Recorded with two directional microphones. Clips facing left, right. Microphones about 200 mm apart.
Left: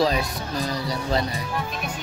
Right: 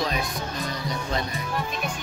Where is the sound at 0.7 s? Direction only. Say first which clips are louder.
Left 6 dB; 35° left (ahead or behind).